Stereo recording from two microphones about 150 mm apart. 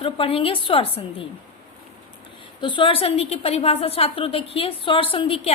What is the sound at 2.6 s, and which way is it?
A woman's voice, 35° left (ahead or behind).